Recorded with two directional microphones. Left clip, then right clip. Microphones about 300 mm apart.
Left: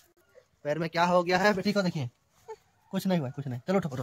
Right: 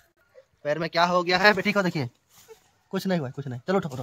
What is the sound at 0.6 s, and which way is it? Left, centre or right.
Speech, centre.